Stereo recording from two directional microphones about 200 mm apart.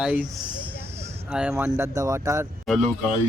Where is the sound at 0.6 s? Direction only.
10° right (ahead or behind).